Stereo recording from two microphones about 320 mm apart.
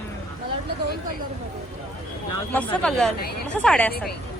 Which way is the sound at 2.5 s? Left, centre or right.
Centre.